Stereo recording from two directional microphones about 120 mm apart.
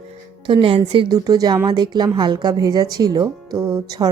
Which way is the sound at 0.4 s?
45° right (ahead or behind).